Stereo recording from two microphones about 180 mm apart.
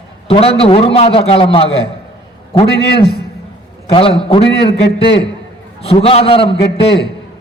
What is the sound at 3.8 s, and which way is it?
Speech, 30° left (ahead or behind).